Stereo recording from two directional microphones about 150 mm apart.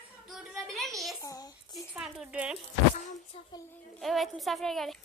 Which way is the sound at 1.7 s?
Centre (ahead or behind).